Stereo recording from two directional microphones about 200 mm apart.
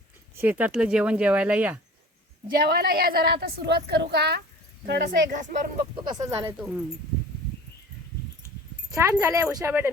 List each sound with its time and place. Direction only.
0.3 s speech: 10° right (ahead or behind)
2.5 s a woman's voice: 50° right (ahead or behind)
6.1 s speech: 20° right (ahead or behind)
8.9 s speech: 15° right (ahead or behind)